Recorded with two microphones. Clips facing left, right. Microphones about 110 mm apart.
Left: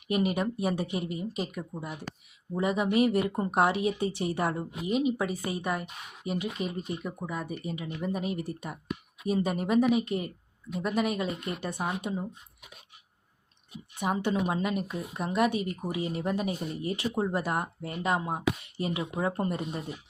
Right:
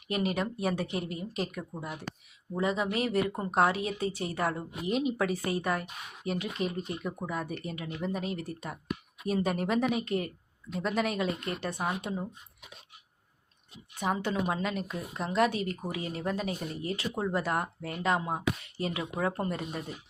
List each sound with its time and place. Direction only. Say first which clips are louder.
0.1 s speech: left 3 dB; 15° left (ahead or behind)
2.6 s speech: left 4 dB; 15° left (ahead or behind)
4.9 s speech: left 1 dB; 5° left (ahead or behind)
14.0 s speech: left 2 dB; 10° left (ahead or behind); by 17.4 s 25° left (ahead or behind)
17.4 s speech: even; 15° left (ahead or behind)
18.9 s speech: left 1 dB; 20° left (ahead or behind)